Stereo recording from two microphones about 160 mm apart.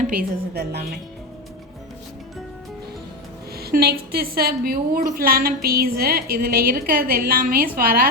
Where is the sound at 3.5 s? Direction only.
80° right.